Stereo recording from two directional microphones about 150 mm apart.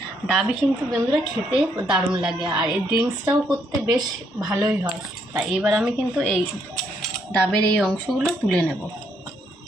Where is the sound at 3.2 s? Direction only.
25° right (ahead or behind).